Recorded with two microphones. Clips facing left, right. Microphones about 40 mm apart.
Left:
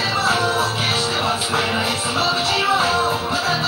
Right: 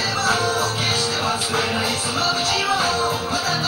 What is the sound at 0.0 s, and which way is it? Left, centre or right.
Music, left.